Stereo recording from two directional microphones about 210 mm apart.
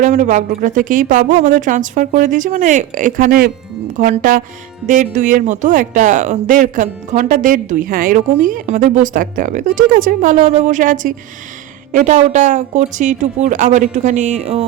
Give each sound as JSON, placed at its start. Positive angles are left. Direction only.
{"t": 0.0, "sound": "speech", "side_deg": -35}